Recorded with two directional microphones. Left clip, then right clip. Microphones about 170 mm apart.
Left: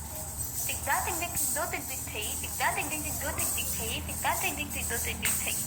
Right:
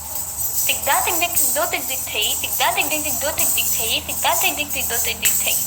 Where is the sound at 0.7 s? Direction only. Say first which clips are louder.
Right 11 dB; 50° right (ahead or behind).